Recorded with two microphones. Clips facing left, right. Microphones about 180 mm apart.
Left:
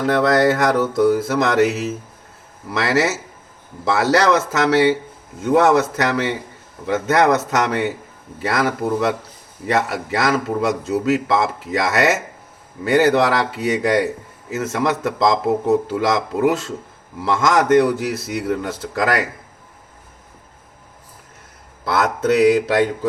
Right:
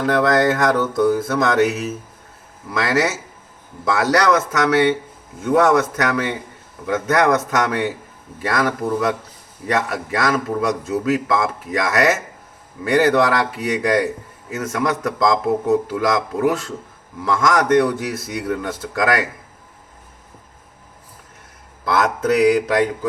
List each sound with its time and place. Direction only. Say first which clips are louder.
0.0 s speech: left 1 dB; 30° left (ahead or behind)
2.7 s speech: left 1 dB; 25° left (ahead or behind)
21.9 s speech: left 1 dB; 25° left (ahead or behind)